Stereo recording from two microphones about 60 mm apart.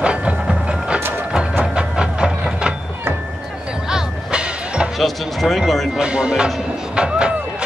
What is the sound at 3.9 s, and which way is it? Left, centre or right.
Music, centre.